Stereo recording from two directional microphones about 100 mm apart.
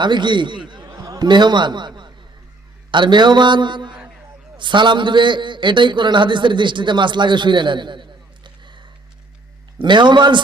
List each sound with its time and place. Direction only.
0.0 s a man's voice: 50° right (ahead or behind)